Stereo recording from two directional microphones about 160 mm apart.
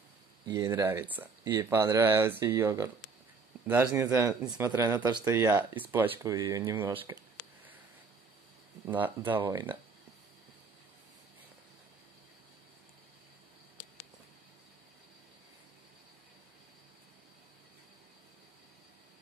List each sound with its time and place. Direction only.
0.5 s speech: 20° right (ahead or behind)
8.8 s speech: 10° right (ahead or behind)